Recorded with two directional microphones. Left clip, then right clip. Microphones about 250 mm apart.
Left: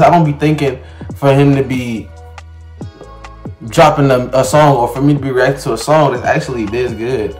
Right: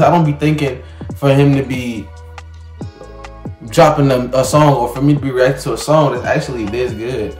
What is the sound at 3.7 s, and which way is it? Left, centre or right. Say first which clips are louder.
A man's voice: left 2 dB; centre.